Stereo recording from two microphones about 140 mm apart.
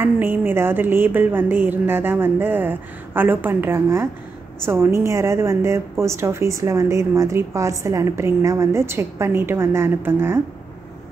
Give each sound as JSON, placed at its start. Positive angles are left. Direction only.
{"t": 0.0, "sound": "a woman's voice", "side_deg": -15}